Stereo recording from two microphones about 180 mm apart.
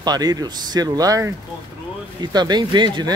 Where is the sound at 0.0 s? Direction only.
20° right (ahead or behind).